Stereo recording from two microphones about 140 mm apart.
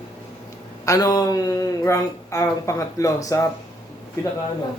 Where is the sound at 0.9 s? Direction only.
25° left (ahead or behind).